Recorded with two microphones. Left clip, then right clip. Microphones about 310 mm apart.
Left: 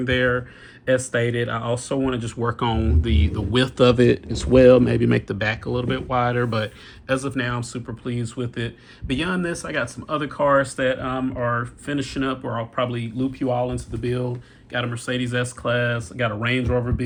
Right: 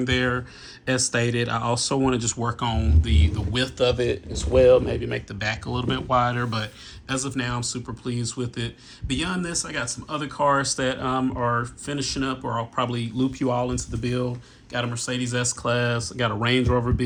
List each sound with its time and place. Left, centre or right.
0.0 s speech: centre
3.8 s speech: left
5.3 s speech: centre; by 14.3 s right
14.7 s speech: centre